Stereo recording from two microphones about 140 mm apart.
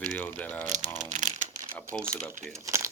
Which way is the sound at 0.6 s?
60° right (ahead or behind).